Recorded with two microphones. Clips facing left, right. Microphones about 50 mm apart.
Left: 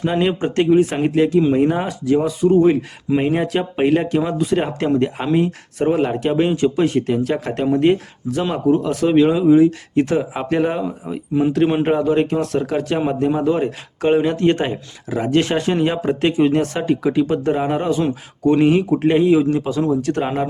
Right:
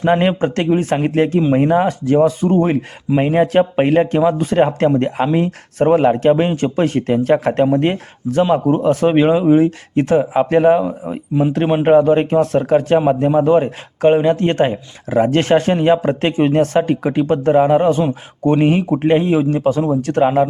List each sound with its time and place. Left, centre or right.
0.0 s speech: right
1.5 s a man's voice: right
1.9 s speech: right
3.2 s a man's voice: right
3.4 s speech: right
5.8 s a man's voice: right
6.1 s speech: right
10.6 s a man's voice: right
13.1 s a man's voice: right
15.3 s speech: right
17.6 s a man's voice: right
19.5 s speech: right
20.2 s a man's voice: centre